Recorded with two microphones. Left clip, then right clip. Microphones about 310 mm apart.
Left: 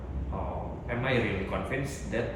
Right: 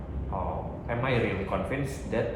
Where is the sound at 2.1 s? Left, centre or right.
Centre.